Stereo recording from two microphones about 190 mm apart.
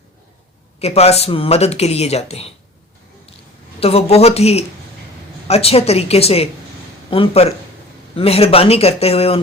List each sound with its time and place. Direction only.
0.8 s speech: 35° left (ahead or behind)
3.8 s speech: 30° left (ahead or behind)